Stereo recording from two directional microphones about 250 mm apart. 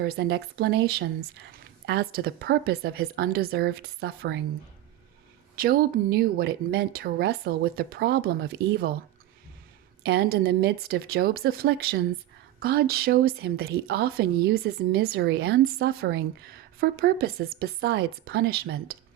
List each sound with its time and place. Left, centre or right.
0.0 s speech: right
5.5 s speech: right
10.0 s speech: right